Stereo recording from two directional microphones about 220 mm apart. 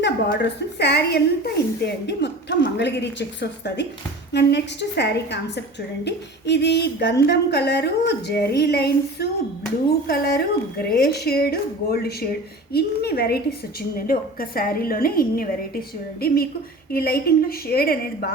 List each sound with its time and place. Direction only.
0.0 s a woman's voice: 50° left (ahead or behind)